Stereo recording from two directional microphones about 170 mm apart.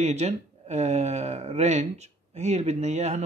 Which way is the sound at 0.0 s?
40° right (ahead or behind).